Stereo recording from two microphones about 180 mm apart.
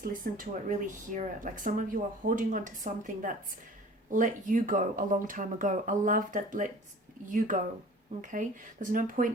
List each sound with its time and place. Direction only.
0.0 s speech: 50° right (ahead or behind)